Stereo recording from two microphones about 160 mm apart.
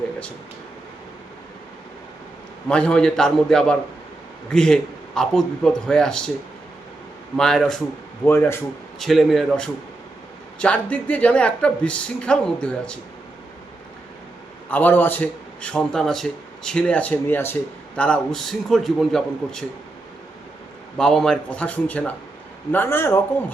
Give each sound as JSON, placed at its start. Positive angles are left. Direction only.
{"t": 2.6, "sound": "speech", "side_deg": 5}
{"t": 7.3, "sound": "speech", "side_deg": 5}
{"t": 8.2, "sound": "speech", "side_deg": 15}
{"t": 9.0, "sound": "speech", "side_deg": 0}
{"t": 14.7, "sound": "speech", "side_deg": 10}
{"t": 21.0, "sound": "speech", "side_deg": 5}